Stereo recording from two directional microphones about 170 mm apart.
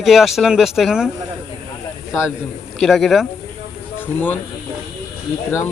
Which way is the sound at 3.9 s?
10° left (ahead or behind).